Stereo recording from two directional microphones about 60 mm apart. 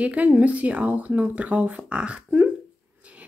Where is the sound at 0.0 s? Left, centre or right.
Right.